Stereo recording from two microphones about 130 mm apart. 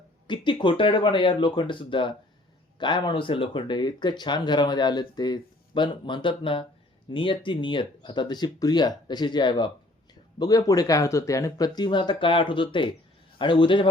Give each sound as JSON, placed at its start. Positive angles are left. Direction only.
{"t": 0.3, "sound": "speech", "side_deg": 40}